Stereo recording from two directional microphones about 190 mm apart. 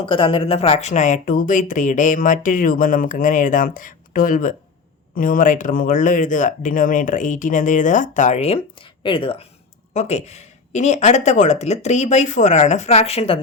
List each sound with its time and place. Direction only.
0.0 s speech: 25° left (ahead or behind)